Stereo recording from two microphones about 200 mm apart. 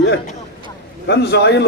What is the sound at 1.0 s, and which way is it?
Speech, 60° left (ahead or behind).